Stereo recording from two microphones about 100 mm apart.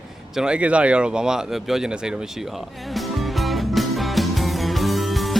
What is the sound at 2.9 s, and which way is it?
Music, centre (ahead or behind).